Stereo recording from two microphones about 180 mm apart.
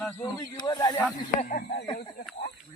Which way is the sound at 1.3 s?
45° left (ahead or behind).